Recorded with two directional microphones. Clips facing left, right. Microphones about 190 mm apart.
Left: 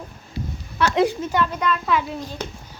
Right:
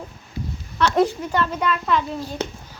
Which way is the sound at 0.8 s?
5° left (ahead or behind).